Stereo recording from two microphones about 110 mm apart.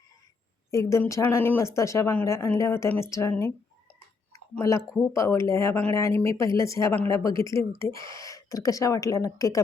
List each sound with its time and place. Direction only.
0.7 s a woman's voice: 25° left (ahead or behind)
4.3 s a sound: 30° left (ahead or behind)
4.9 s a woman's voice: 25° left (ahead or behind)